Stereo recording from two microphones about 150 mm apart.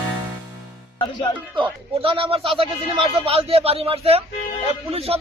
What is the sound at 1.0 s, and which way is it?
Music, 30° left (ahead or behind).